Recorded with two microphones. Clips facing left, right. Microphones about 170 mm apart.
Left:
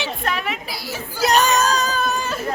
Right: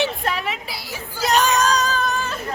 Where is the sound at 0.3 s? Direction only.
30° right (ahead or behind).